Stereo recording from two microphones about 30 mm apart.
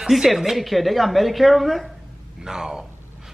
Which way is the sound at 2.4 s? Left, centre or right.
Centre.